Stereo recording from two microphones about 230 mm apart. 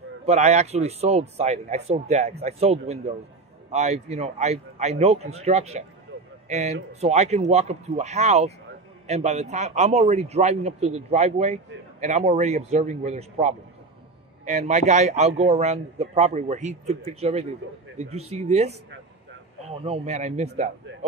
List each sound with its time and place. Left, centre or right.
0.2 s a man's voice: right
19.8 s a man's voice: right